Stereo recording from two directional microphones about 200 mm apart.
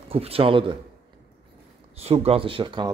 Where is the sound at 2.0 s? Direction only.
30° right (ahead or behind).